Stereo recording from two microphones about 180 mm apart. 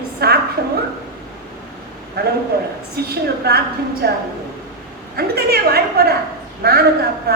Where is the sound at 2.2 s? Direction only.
60° right (ahead or behind).